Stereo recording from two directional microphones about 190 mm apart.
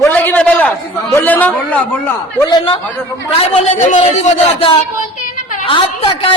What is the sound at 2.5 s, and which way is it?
Speech, 25° left (ahead or behind).